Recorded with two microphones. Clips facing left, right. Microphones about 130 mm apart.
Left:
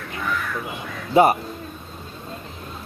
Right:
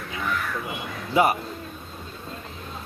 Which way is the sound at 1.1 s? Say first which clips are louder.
Left 5 dB; 35° left (ahead or behind).